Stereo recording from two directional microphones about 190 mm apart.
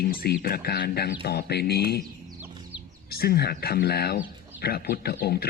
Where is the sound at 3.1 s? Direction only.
55° left (ahead or behind).